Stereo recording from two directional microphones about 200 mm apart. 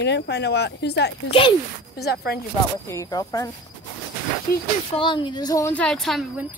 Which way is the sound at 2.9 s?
15° left (ahead or behind).